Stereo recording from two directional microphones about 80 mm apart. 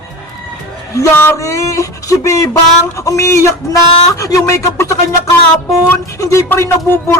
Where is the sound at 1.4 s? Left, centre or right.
Left.